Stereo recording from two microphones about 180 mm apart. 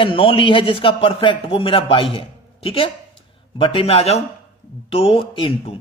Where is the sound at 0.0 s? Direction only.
30° left (ahead or behind).